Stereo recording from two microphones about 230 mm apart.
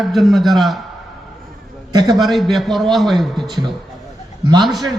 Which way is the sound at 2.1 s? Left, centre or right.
Centre.